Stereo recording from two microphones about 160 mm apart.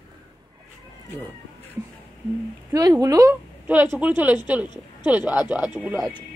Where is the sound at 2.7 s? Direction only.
20° right (ahead or behind).